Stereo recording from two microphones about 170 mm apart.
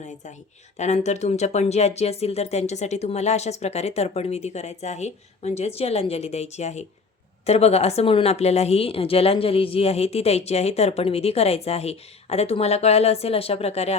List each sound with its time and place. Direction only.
0.8 s a woman's voice: 40° left (ahead or behind)